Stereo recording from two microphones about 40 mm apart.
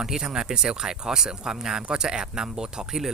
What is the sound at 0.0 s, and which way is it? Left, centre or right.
Speech, centre.